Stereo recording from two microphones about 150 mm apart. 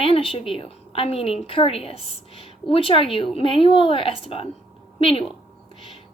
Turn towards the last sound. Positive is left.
turn(degrees=40)  # may be behind; listen again after turning